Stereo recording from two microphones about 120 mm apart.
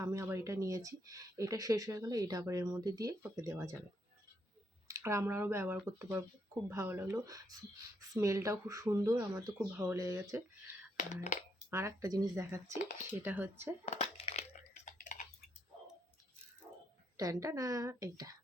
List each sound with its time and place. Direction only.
0.0 s speech: 25° right (ahead or behind)
4.9 s speech: 25° right (ahead or behind)
10.9 s speech: 90° left
11.7 s speech: 25° right (ahead or behind)
13.8 s a sound: 60° left (ahead or behind); by 15.3 s 85° left
17.2 s speech: 30° right (ahead or behind)